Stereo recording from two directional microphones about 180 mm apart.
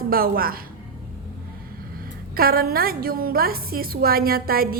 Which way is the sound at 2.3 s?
55° right (ahead or behind).